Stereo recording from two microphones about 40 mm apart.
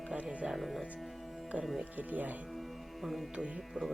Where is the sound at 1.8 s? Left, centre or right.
Right.